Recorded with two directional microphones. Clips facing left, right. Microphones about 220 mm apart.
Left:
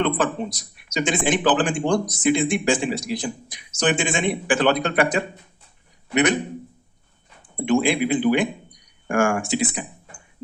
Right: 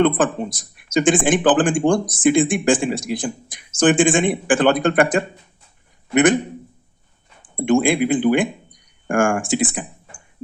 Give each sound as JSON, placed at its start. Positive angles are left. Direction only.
{"t": 0.0, "sound": "speech", "side_deg": -50}
{"t": 7.5, "sound": "speech", "side_deg": -50}